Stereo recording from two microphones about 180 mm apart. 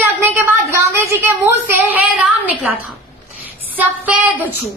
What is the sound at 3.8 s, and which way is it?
Speech, 10° right (ahead or behind).